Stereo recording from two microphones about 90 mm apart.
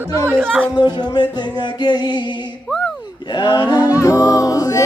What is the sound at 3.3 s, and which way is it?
Music, 55° left (ahead or behind).